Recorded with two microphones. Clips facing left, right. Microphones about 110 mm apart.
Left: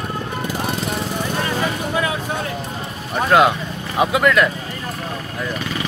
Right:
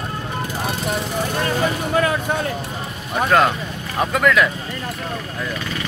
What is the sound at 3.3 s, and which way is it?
Speech, 10° left (ahead or behind).